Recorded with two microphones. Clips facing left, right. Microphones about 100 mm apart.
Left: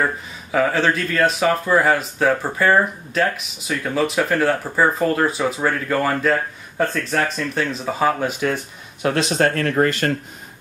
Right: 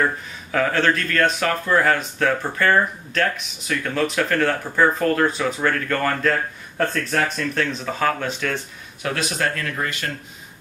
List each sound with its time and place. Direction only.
0.0 s speech: 10° left (ahead or behind)
9.0 s speech: 30° left (ahead or behind); by 10.1 s 45° left (ahead or behind)